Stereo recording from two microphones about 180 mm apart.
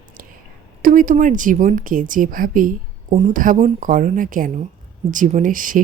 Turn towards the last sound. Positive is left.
turn(degrees=-50)  # may be behind; listen again after turning